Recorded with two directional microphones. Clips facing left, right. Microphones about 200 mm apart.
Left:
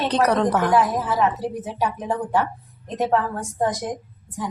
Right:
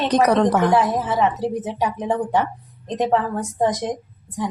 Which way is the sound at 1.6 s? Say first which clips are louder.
Right 2 dB; 20° right (ahead or behind).